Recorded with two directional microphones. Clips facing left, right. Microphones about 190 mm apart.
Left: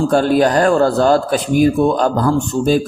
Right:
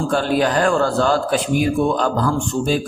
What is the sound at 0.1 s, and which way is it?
A man's voice, 40° left (ahead or behind).